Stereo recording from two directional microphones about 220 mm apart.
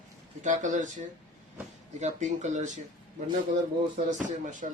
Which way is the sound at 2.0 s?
35° right (ahead or behind).